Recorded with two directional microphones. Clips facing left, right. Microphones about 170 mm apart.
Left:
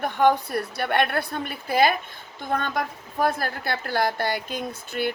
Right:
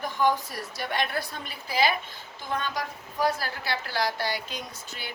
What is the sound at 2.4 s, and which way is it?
A woman's voice, 55° left (ahead or behind).